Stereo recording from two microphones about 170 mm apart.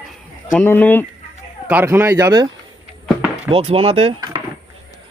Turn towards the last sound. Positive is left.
turn(degrees=-35)  # may be behind; listen again after turning